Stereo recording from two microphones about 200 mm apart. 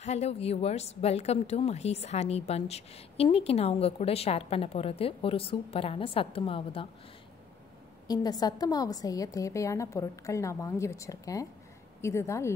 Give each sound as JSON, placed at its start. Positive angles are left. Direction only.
{"t": 0.0, "sound": "a woman's voice", "side_deg": 35}
{"t": 8.1, "sound": "a woman's voice", "side_deg": 20}